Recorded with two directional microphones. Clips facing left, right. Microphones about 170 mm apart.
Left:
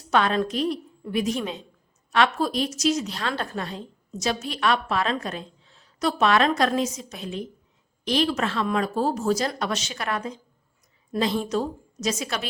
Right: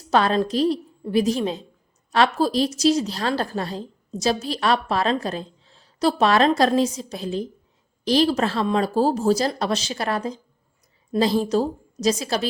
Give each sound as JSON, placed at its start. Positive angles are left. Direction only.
{"t": 0.1, "sound": "a woman's voice", "side_deg": -35}